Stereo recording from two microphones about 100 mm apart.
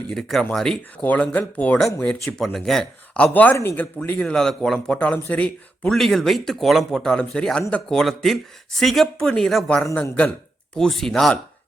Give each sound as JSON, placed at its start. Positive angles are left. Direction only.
{"t": 0.1, "sound": "a man's voice", "side_deg": 5}
{"t": 2.2, "sound": "speech", "side_deg": 5}
{"t": 3.3, "sound": "speech", "side_deg": 20}
{"t": 3.9, "sound": "a man's voice", "side_deg": 15}
{"t": 10.8, "sound": "speech", "side_deg": 5}